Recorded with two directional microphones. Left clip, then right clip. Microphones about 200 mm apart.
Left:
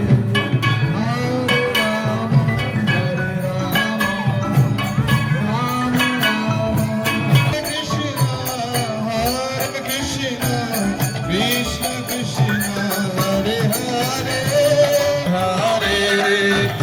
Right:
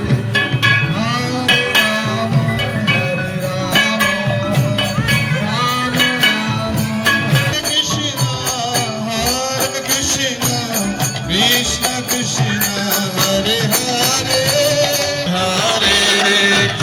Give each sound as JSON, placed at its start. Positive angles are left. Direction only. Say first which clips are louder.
{"t": 11.3, "sound": "music", "louder": "right 6 dB", "side_deg": 55}
{"t": 13.2, "sound": "music", "louder": "right 4 dB", "side_deg": 45}
{"t": 15.8, "sound": "music", "louder": "right 4 dB", "side_deg": 50}